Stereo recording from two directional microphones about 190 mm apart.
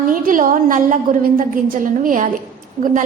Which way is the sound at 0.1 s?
45° right (ahead or behind).